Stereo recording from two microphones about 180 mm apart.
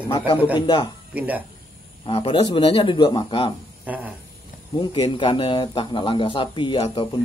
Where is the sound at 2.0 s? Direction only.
35° left (ahead or behind).